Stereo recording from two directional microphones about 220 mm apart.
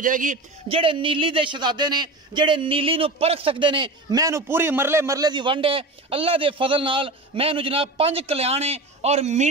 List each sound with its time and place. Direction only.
0.0 s a man's voice: 35° right (ahead or behind)